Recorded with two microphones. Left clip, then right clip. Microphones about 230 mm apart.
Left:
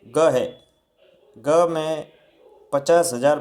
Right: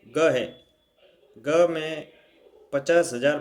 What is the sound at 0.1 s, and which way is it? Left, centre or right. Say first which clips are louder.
A man's voice: left 4 dB; centre.